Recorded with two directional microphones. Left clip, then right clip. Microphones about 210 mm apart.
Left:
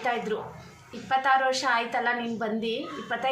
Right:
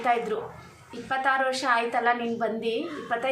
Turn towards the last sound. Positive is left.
turn(degrees=-5)  # may be behind; listen again after turning